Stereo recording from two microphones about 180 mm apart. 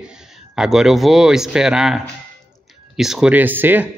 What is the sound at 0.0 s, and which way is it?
Speech, 5° right (ahead or behind).